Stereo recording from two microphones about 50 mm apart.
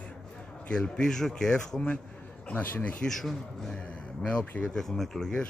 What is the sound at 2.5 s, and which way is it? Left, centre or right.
Speech, left.